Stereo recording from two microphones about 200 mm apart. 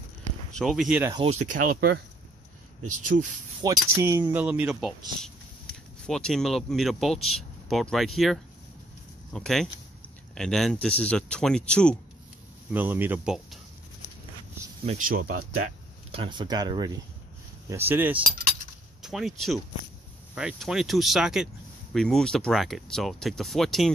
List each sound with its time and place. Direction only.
0.5 s speech: centre (ahead or behind)
1.4 s speech: 40° right (ahead or behind)
3.6 s speech: 15° right (ahead or behind); by 12.0 s 5° left (ahead or behind)
12.7 s speech: 10° right (ahead or behind)
14.9 s speech: 45° right (ahead or behind)
16.1 s speech: 25° right (ahead or behind); by 23.9 s centre (ahead or behind)